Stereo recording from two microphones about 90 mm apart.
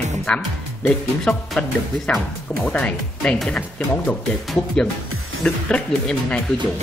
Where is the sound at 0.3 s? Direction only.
10° left (ahead or behind).